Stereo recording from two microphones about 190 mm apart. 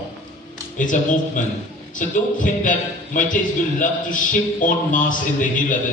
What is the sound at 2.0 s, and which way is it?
A man's voice, 45° left (ahead or behind).